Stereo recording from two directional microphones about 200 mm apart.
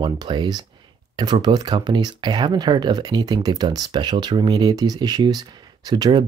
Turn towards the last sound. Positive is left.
turn(degrees=-20)  # may be behind; listen again after turning